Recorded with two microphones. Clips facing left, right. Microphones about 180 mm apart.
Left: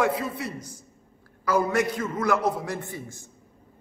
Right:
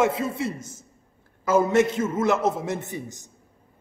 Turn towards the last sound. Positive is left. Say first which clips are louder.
# right 3 dB
turn(degrees=-20)  # may be behind; listen again after turning